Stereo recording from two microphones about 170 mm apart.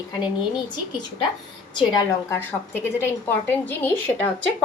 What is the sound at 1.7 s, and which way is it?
Speech, 25° left (ahead or behind).